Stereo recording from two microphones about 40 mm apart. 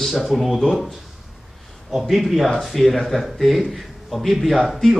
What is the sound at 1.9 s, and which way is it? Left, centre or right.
A man's voice, centre.